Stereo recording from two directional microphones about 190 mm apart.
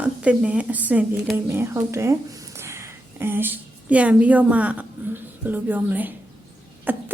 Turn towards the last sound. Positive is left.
turn(degrees=-10)  # may be behind; listen again after turning